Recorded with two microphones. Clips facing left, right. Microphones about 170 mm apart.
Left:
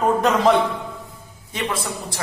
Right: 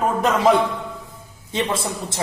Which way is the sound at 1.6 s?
25° right (ahead or behind).